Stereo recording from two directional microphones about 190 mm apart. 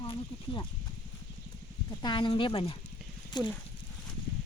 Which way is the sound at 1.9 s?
20° left (ahead or behind).